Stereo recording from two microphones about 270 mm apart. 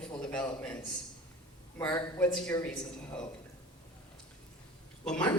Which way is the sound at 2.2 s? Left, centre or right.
Centre.